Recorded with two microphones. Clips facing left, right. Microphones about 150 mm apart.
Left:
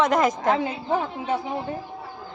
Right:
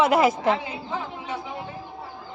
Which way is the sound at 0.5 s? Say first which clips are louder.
Left 5 dB; 55° left (ahead or behind).